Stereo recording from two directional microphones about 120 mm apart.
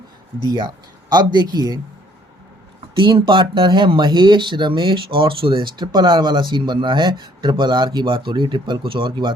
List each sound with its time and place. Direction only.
0.4 s speech: 35° right (ahead or behind)
2.9 s speech: 45° right (ahead or behind)